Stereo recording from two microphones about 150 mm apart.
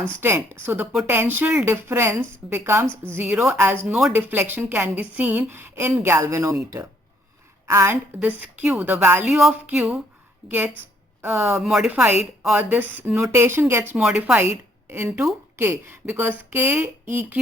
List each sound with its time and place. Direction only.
0.2 s a woman's voice: 15° right (ahead or behind)
11.2 s a woman's voice: 15° right (ahead or behind)
11.6 s a woman's voice: 5° right (ahead or behind)